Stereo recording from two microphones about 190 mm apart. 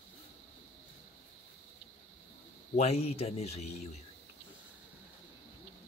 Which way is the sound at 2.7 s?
35° left (ahead or behind).